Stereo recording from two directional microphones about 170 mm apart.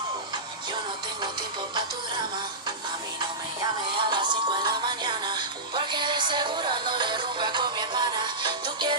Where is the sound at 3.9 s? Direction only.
25° right (ahead or behind).